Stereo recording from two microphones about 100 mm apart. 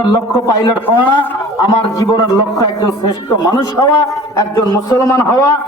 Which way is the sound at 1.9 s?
40° left (ahead or behind).